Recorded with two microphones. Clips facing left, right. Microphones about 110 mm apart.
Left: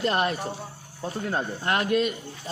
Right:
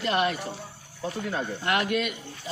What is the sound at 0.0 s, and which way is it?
Speech, 40° left (ahead or behind).